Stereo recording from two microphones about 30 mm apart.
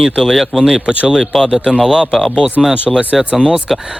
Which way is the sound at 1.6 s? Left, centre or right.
Right.